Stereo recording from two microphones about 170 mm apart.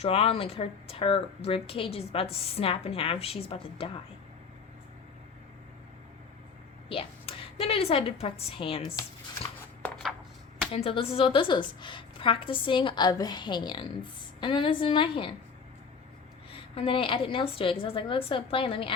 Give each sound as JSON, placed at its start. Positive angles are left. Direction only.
{"t": 0.0, "sound": "speech", "side_deg": 35}
{"t": 6.8, "sound": "a woman's voice", "side_deg": 35}
{"t": 9.8, "sound": "a sound", "side_deg": 0}
{"t": 10.7, "sound": "a woman's voice", "side_deg": 35}
{"t": 16.5, "sound": "speech", "side_deg": 30}